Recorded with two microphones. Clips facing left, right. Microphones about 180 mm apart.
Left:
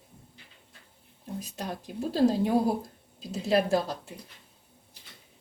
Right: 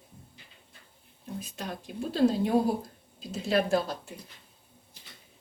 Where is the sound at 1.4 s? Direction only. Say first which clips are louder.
Left 2 dB; 35° left (ahead or behind).